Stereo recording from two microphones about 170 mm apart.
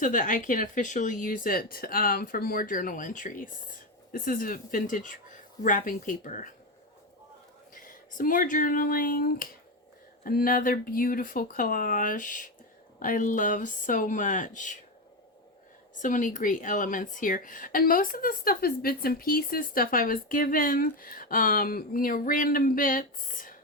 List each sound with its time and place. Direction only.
0.0 s speech: 50° left (ahead or behind)
7.7 s speech: 55° left (ahead or behind)
16.0 s speech: 50° left (ahead or behind)